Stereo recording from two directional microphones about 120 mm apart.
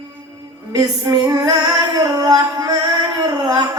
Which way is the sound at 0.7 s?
30° right (ahead or behind).